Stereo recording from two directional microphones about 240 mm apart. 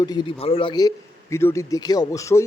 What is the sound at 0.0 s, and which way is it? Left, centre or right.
A man's voice, centre.